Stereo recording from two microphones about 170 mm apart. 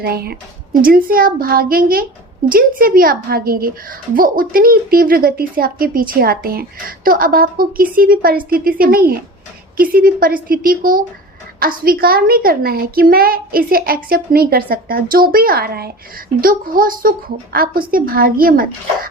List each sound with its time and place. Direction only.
0.0 s a child's voice: 65° right (ahead or behind)